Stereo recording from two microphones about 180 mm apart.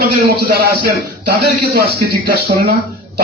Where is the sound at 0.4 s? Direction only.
55° right (ahead or behind).